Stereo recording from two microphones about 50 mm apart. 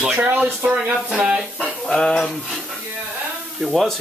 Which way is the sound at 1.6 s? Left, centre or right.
Centre.